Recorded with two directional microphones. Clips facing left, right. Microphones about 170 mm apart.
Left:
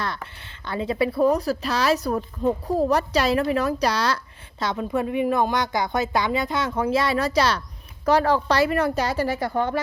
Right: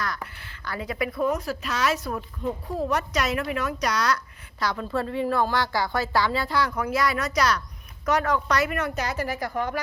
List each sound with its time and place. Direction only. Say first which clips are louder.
0.3 s a woman's voice: left 5 dB; 25° left (ahead or behind)